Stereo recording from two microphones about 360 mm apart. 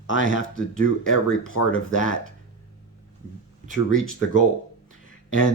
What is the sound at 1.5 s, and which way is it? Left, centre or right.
Speech, left.